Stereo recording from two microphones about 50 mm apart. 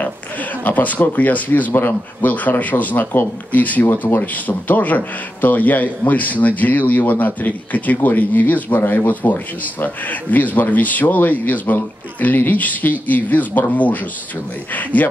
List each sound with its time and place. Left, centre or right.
0.7 s speech: left
3.0 s speech: left
3.5 s speech: left